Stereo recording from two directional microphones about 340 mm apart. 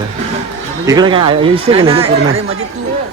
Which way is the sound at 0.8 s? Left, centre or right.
Centre.